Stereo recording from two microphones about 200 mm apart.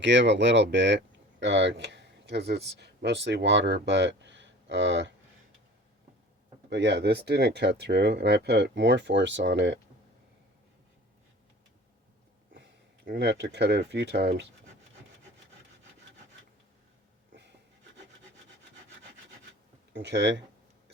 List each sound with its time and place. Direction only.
0.0 s speech: 65° right (ahead or behind)
6.7 s speech: 55° right (ahead or behind)
13.1 s speech: 60° right (ahead or behind)
19.9 s speech: 60° right (ahead or behind)